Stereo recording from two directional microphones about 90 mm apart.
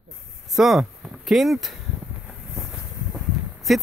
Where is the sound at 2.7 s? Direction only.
5° right (ahead or behind).